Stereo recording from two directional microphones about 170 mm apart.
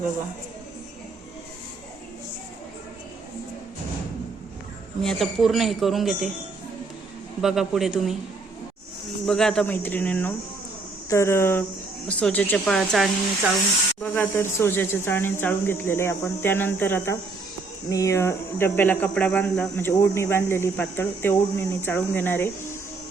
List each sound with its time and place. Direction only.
5.0 s speech: centre (ahead or behind)
7.4 s speech: centre (ahead or behind)
9.2 s speech: 5° left (ahead or behind)